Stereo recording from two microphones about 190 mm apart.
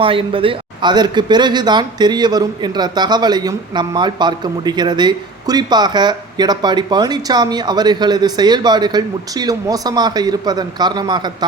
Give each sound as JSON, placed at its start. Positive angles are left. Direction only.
{"t": 0.0, "sound": "speech", "side_deg": -30}